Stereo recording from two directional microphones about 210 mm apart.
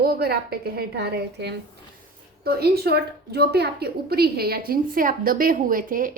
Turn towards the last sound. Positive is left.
turn(degrees=-40)  # may be behind; listen again after turning